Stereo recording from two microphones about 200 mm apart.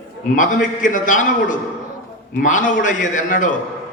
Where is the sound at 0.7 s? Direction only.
40° left (ahead or behind).